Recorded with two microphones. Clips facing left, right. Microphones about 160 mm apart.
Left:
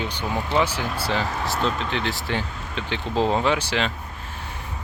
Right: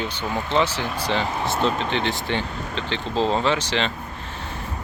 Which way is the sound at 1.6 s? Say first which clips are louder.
Right 3 dB; 35° right (ahead or behind).